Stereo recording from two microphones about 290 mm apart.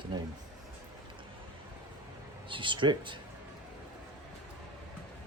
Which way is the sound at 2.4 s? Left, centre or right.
Centre.